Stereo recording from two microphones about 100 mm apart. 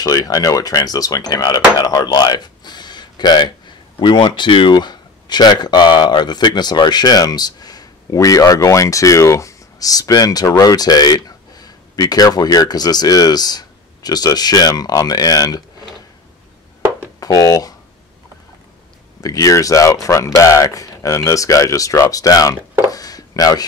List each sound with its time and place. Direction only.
0.0 s speech: 35° left (ahead or behind)
17.2 s speech: 40° left (ahead or behind)
19.2 s speech: 35° left (ahead or behind)